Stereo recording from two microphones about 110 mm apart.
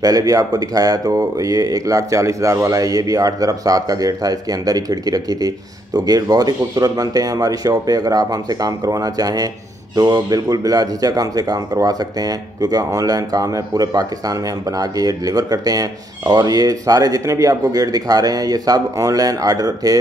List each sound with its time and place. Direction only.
0.0 s speech: 35° right (ahead or behind)